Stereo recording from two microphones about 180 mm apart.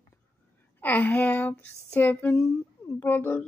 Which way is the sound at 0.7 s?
10° left (ahead or behind).